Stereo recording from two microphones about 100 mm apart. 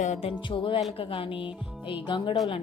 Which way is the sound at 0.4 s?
60° left (ahead or behind).